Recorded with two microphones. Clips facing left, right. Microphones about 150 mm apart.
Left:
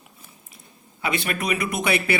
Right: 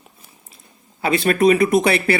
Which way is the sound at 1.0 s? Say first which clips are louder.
Right 9 dB; 35° right (ahead or behind).